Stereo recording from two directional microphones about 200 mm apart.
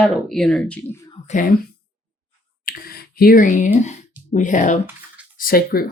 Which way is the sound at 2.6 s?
45° left (ahead or behind).